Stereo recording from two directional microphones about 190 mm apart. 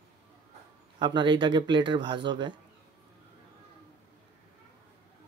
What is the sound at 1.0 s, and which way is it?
Speech, 25° right (ahead or behind).